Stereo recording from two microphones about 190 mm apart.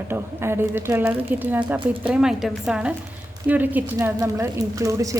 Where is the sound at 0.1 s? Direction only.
10° right (ahead or behind).